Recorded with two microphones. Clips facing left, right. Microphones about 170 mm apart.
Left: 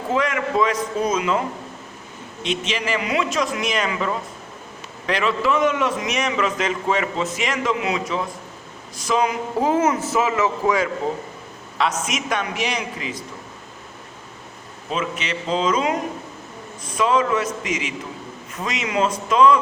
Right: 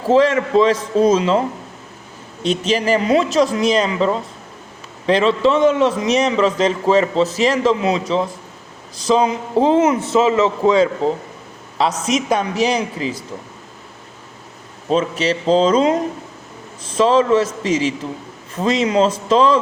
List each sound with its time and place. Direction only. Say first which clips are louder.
0.1 s a man's voice: right 9 dB; 30° right (ahead or behind)
14.8 s a man's voice: right 9 dB; 35° right (ahead or behind)